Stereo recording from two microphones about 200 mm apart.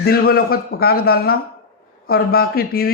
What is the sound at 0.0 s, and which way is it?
Speech, 50° left (ahead or behind).